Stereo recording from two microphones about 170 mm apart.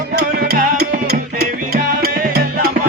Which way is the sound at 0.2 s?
65° right (ahead or behind).